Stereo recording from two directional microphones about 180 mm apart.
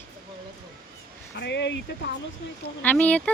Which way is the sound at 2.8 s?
10° left (ahead or behind).